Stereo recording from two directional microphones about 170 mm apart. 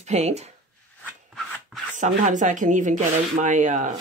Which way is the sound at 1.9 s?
45° right (ahead or behind).